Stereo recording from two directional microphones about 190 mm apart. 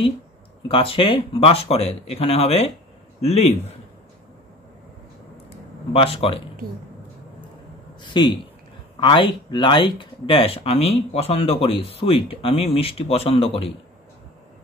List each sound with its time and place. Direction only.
0.7 s speech: 30° left (ahead or behind)
5.9 s speech: 30° left (ahead or behind)
8.0 s speech: 25° left (ahead or behind)